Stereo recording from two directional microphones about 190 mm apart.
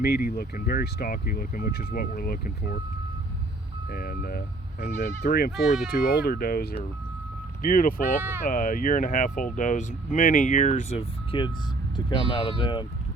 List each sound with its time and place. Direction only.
0.0 s speech: 55° left (ahead or behind)
3.8 s speech: 55° left (ahead or behind)
8.2 s speech: 10° right (ahead or behind)
8.4 s speech: 45° left (ahead or behind); by 12.8 s 25° left (ahead or behind)